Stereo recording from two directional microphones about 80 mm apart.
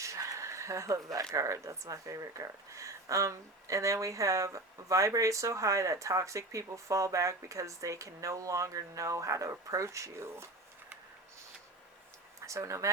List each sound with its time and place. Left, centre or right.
0.0 s speech: right
12.5 s speech: right